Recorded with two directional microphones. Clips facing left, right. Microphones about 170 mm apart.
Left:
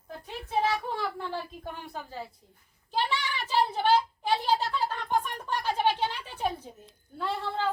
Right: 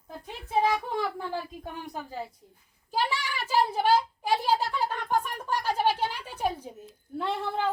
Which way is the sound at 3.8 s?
10° right (ahead or behind).